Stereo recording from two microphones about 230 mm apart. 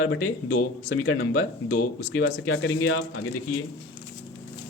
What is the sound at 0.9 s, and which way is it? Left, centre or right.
A man's voice, left.